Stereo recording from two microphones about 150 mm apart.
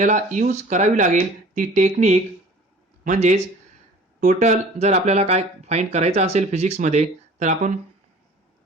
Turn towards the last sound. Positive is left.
turn(degrees=-55)  # may be behind; listen again after turning